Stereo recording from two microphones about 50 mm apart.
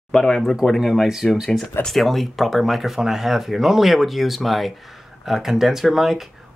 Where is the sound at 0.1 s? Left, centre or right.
Centre.